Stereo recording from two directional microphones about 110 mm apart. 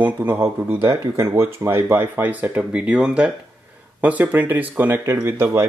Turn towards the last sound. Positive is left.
turn(degrees=-25)  # may be behind; listen again after turning